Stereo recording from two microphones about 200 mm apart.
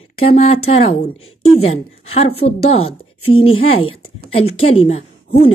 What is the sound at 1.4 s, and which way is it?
Speech, 90° left.